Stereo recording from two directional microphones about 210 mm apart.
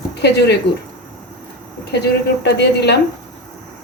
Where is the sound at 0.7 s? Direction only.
50° left (ahead or behind).